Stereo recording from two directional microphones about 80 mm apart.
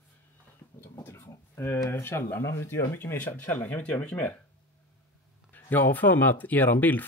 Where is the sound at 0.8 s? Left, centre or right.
Left.